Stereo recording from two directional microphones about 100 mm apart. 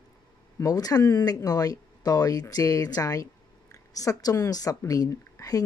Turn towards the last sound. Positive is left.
turn(degrees=35)  # may be behind; listen again after turning